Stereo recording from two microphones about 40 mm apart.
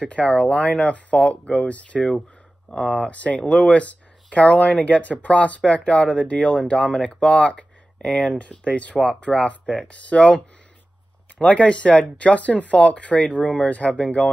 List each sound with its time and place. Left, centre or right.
0.1 s speech: left